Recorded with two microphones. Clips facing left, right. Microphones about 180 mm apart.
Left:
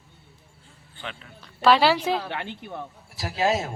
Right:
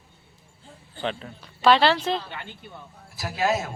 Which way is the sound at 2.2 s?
75° left (ahead or behind).